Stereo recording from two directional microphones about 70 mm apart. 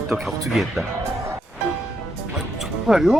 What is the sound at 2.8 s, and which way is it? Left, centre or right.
Speech, centre.